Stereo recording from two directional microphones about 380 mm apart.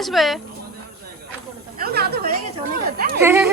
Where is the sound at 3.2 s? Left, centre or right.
Centre.